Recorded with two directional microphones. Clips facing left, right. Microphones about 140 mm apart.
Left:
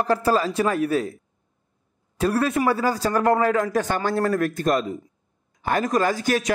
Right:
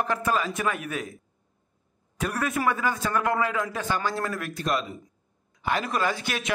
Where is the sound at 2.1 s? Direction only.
30° left (ahead or behind).